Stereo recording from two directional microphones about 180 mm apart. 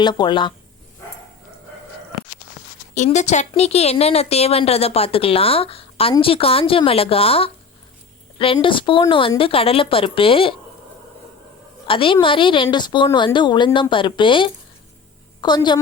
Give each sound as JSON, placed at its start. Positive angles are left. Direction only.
{"t": 0.0, "sound": "speech", "side_deg": 25}
{"t": 2.9, "sound": "a woman's voice", "side_deg": 40}
{"t": 8.5, "sound": "speech", "side_deg": 30}
{"t": 11.9, "sound": "speech", "side_deg": 30}